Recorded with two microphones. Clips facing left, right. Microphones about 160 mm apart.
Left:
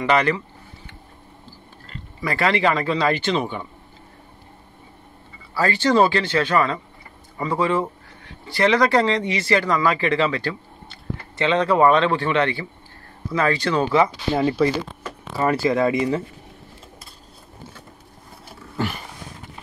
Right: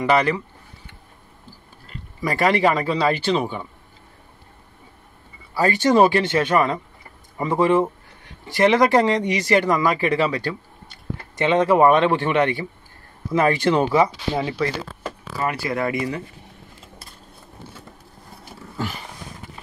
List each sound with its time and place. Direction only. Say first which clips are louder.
0.0 s speech: right 1 dB; 10° right (ahead or behind)
2.2 s speech: right 2 dB; 15° right (ahead or behind)
5.5 s speech: right 1 dB; 15° right (ahead or behind)
15.3 s speech: left 5 dB; 25° left (ahead or behind)